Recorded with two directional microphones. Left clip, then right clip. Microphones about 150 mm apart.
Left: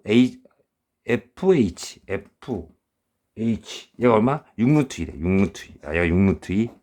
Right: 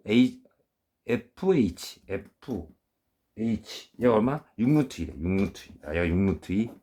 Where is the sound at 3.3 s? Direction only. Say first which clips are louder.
Left 4 dB; 65° left (ahead or behind).